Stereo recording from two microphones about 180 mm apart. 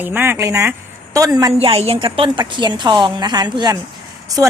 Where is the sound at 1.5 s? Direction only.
35° right (ahead or behind).